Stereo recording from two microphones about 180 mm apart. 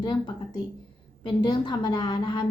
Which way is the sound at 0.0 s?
25° left (ahead or behind).